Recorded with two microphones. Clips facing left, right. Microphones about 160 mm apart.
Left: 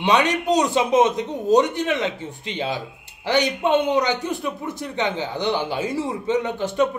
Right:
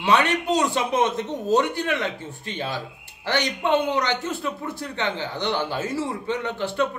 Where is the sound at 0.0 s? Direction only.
15° left (ahead or behind).